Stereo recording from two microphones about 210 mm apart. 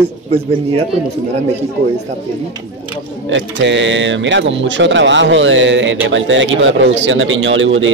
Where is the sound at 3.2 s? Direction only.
60° right (ahead or behind).